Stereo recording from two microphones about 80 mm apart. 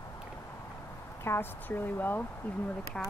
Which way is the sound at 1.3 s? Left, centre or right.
Left.